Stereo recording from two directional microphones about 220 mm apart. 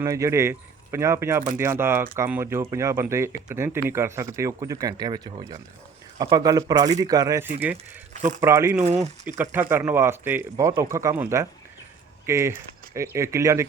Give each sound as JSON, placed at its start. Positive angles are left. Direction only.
{"t": 0.0, "sound": "speech", "side_deg": -15}